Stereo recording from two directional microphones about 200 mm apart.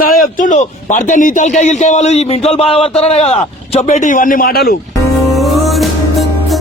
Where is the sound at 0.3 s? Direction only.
40° left (ahead or behind).